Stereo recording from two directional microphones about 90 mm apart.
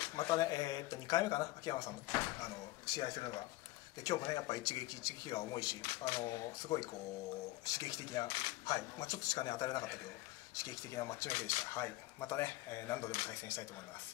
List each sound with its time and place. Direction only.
0.1 s speech: 45° left (ahead or behind)
6.2 s speech: 40° left (ahead or behind)